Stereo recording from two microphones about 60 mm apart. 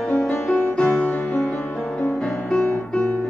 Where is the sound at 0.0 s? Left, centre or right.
Centre.